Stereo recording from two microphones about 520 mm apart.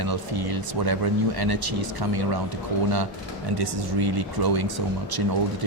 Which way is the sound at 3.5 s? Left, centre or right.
Right.